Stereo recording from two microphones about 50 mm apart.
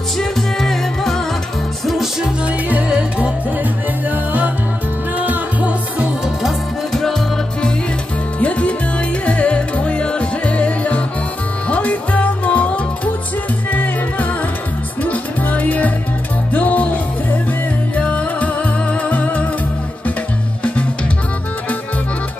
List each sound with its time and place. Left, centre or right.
0.2 s music: centre
2.7 s music: right
4.1 s music: right
6.9 s music: centre
8.4 s music: left